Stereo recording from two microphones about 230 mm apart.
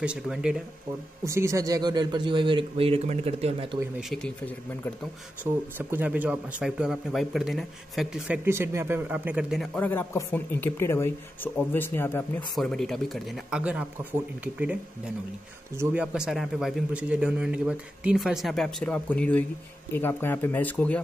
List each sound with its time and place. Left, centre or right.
0.0 s speech: centre; by 3.7 s right
4.0 s speech: centre
5.4 s speech: centre